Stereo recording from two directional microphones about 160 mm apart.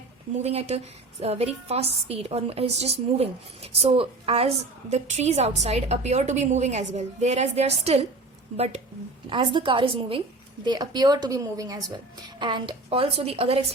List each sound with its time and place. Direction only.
0.4 s a woman's voice: 40° right (ahead or behind)
9.3 s a woman's voice: 30° right (ahead or behind)